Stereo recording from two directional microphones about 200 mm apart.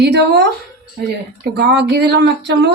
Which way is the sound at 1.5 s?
55° right (ahead or behind).